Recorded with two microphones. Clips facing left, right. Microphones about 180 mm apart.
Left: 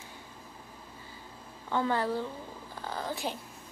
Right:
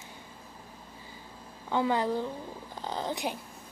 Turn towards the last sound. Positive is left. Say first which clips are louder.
# right 2 dB
turn(degrees=-15)  # may be behind; listen again after turning